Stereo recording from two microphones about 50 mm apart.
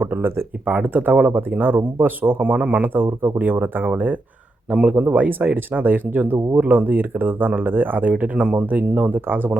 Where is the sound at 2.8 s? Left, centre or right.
Right.